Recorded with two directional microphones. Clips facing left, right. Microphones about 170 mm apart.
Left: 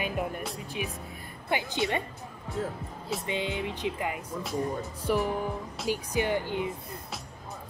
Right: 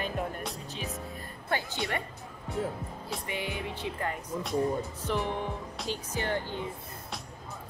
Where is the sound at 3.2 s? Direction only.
20° left (ahead or behind).